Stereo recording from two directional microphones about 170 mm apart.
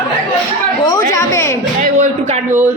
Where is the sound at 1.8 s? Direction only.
40° right (ahead or behind).